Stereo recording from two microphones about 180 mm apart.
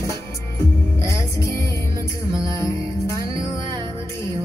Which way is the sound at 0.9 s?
15° left (ahead or behind).